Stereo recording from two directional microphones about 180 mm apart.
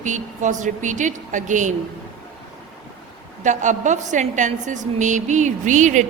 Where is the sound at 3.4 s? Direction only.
45° right (ahead or behind).